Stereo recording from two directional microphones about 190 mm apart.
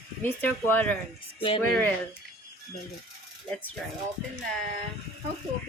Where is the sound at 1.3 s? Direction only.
30° left (ahead or behind).